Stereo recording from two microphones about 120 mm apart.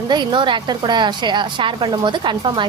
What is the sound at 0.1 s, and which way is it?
A woman's voice, 40° right (ahead or behind).